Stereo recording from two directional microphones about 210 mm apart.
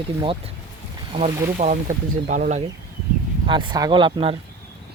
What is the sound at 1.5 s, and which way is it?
Speech, 35° right (ahead or behind).